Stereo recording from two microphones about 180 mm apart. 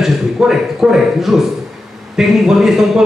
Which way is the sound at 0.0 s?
Centre (ahead or behind).